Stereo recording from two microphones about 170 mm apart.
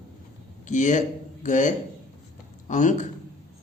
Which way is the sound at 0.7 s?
45° left (ahead or behind).